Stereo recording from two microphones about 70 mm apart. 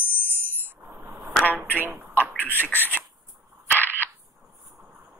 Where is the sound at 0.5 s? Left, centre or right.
Right.